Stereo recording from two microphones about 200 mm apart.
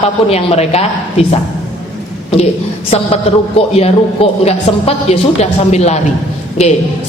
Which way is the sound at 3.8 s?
30° left (ahead or behind).